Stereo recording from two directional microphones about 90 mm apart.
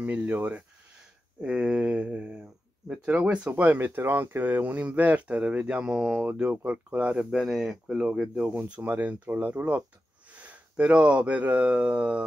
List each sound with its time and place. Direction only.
0.0 s speech: 20° right (ahead or behind)